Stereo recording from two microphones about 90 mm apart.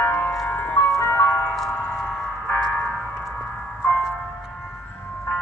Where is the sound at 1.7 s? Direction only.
20° left (ahead or behind).